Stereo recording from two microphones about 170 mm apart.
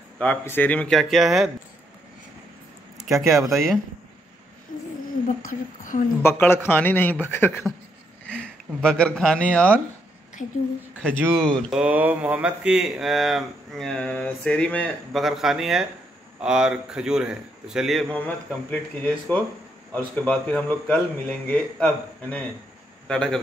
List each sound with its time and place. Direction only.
0.2 s speech: 10° left (ahead or behind)
3.0 s speech: centre (ahead or behind)
5.5 s a woman's voice: 50° left (ahead or behind)
6.2 s a man's voice: 15° left (ahead or behind)
10.4 s a woman's voice: 45° left (ahead or behind)
11.1 s speech: 10° right (ahead or behind)
11.3 s speech: 5° left (ahead or behind)
11.8 s a man's voice: 10° right (ahead or behind)